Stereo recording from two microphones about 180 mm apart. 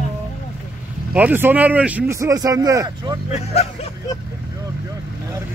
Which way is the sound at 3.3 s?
35° left (ahead or behind).